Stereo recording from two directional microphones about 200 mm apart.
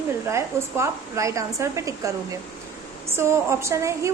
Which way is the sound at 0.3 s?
15° right (ahead or behind).